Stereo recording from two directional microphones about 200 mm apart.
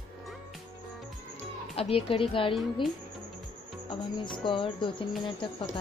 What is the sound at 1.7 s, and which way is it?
Speech, 30° left (ahead or behind).